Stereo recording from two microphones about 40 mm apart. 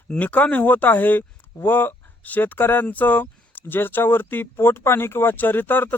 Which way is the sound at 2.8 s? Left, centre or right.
Left.